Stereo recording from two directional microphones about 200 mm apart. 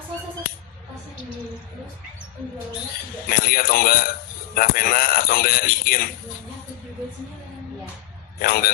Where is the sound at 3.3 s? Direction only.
45° left (ahead or behind).